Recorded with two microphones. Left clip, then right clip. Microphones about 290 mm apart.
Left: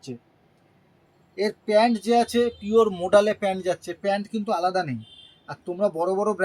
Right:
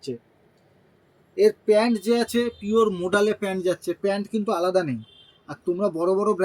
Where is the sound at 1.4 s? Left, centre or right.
Left.